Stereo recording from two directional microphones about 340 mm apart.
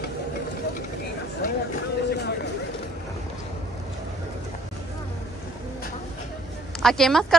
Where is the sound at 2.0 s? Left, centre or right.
Left.